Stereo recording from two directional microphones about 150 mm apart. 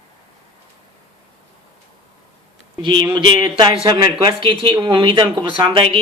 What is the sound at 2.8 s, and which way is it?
Speech, 30° right (ahead or behind).